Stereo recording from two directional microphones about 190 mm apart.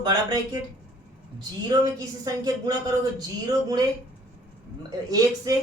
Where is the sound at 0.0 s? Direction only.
20° right (ahead or behind).